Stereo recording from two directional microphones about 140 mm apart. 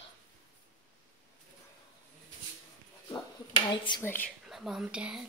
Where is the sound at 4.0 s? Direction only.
15° left (ahead or behind).